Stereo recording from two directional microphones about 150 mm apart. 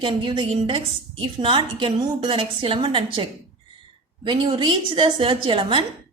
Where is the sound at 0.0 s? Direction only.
35° right (ahead or behind).